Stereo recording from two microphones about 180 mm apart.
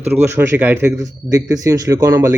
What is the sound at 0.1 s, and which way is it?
A man's voice, 10° right (ahead or behind).